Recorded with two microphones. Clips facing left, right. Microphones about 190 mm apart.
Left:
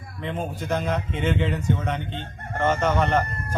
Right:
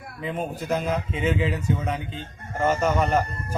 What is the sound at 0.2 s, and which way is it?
Speech, 5° right (ahead or behind).